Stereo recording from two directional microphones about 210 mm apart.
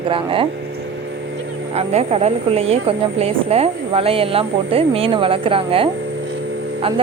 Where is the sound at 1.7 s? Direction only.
30° right (ahead or behind).